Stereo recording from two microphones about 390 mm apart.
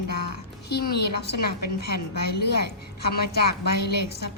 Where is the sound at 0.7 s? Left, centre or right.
Left.